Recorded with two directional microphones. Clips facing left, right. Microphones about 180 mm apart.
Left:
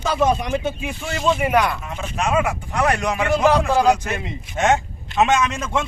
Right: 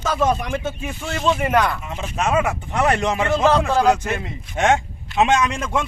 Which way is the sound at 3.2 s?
15° left (ahead or behind).